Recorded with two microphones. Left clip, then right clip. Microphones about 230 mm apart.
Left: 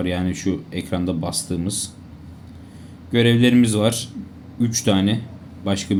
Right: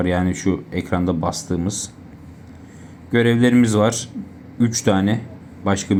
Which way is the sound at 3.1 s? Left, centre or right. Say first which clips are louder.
Right 1 dB; centre.